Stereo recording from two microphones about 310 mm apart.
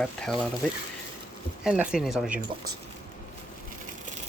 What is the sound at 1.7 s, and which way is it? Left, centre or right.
Speech, centre.